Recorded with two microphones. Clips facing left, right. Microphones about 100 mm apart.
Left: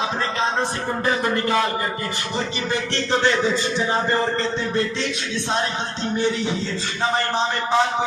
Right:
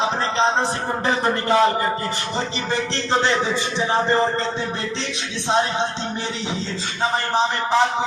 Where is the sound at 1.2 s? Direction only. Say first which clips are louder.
Right 2 dB; 30° right (ahead or behind).